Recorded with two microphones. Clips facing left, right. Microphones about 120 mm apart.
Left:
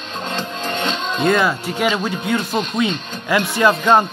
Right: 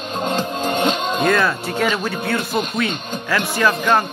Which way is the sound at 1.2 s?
15° left (ahead or behind).